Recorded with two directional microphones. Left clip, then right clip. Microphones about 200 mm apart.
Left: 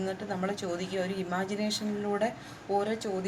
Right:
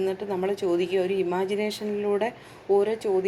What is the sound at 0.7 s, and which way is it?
Speech, 20° right (ahead or behind).